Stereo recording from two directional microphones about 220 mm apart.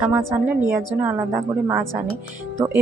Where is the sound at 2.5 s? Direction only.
10° right (ahead or behind).